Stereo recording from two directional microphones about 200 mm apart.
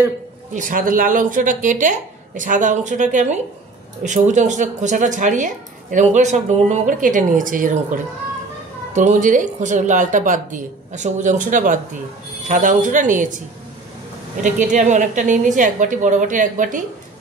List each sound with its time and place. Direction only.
0.6 s speech: 45° right (ahead or behind)
8.9 s speech: 40° right (ahead or behind)
14.4 s speech: 40° right (ahead or behind)